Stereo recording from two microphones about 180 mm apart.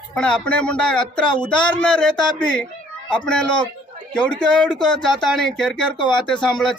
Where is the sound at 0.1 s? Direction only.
5° left (ahead or behind).